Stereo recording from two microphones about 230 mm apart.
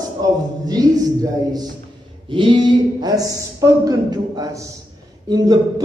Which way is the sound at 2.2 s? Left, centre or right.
Right.